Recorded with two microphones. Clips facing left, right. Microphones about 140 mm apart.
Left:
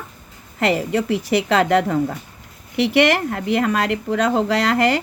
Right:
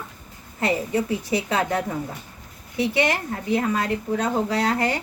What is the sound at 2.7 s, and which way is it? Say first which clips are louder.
Speech: left 6 dB; 90° left.